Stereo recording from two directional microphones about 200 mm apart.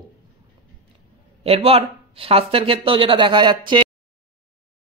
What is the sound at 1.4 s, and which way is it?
Speech, 30° right (ahead or behind).